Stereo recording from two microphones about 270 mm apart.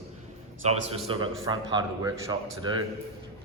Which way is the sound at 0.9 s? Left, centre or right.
Centre.